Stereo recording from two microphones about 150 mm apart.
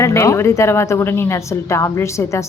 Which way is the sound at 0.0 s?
20° left (ahead or behind).